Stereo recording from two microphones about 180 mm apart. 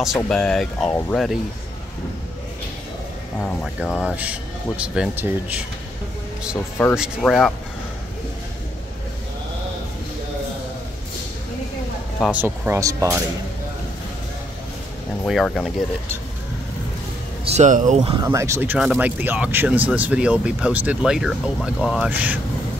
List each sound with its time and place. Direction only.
0.0 s speech: centre (ahead or behind)
3.3 s speech: centre (ahead or behind)
7.0 s speech: centre (ahead or behind)
12.3 s speech: 10° right (ahead or behind)
15.2 s speech: centre (ahead or behind)
17.5 s speech: 40° right (ahead or behind)
18.2 s speech: 15° right (ahead or behind)